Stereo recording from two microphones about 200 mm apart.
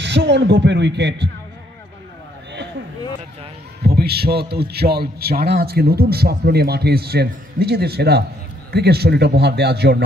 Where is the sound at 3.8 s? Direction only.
50° right (ahead or behind).